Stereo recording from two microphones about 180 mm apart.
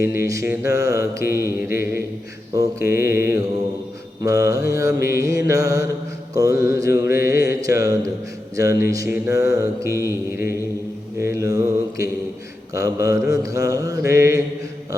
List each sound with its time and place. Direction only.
0.0 s mantra: 15° right (ahead or behind)